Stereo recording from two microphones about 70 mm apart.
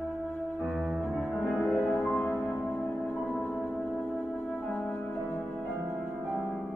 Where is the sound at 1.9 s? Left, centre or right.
Centre.